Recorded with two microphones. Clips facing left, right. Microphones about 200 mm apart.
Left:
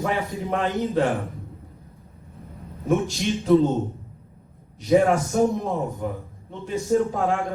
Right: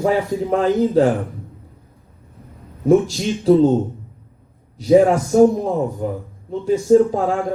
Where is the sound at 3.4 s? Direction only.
30° right (ahead or behind).